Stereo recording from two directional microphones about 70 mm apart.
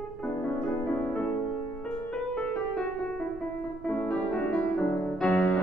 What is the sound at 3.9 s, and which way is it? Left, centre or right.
Music, centre.